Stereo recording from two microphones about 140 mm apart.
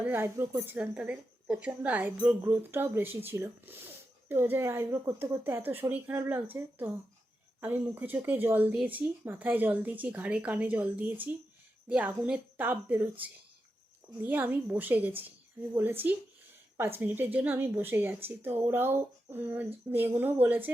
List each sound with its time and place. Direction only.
0.0 s speech: 15° right (ahead or behind)